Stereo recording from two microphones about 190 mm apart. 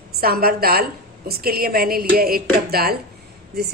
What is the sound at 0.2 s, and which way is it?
A woman's voice, 50° right (ahead or behind).